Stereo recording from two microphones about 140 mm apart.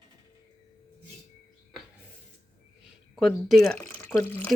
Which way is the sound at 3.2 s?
Centre (ahead or behind).